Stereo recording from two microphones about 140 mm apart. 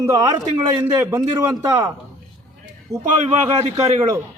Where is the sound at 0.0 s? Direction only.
20° right (ahead or behind).